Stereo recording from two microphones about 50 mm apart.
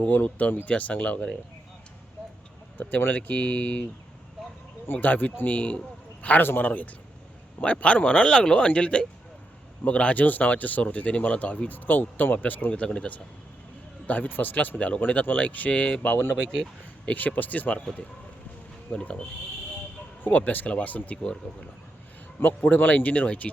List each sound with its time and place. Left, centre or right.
0.0 s speech: left
3.2 s speech: left
4.9 s a man's voice: left
12.7 s speech: left
14.1 s speech: left
18.9 s speech: left
20.2 s speech: left
22.4 s speech: left